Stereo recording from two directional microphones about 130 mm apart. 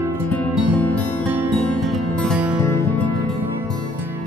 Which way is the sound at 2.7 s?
20° left (ahead or behind).